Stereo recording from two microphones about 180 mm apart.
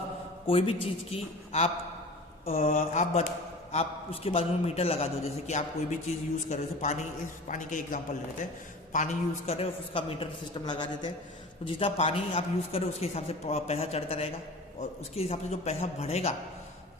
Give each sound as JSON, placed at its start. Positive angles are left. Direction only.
{"t": 0.4, "sound": "a man's voice", "side_deg": 30}